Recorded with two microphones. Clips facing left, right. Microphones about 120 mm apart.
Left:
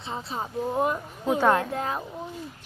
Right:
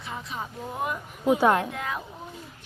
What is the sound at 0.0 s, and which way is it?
Speech, 30° left (ahead or behind).